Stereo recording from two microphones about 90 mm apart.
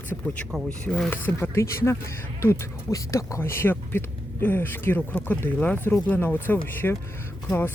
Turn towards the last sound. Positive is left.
turn(degrees=25)  # may be behind; listen again after turning